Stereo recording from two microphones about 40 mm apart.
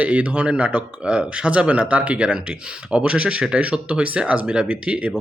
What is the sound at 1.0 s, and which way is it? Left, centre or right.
Speech, right.